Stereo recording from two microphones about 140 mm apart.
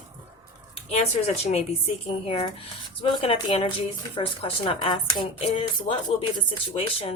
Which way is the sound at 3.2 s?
40° left (ahead or behind).